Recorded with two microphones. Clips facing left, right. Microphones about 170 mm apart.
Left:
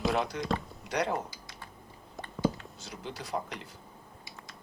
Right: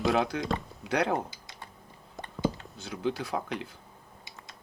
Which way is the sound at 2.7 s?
60° right (ahead or behind).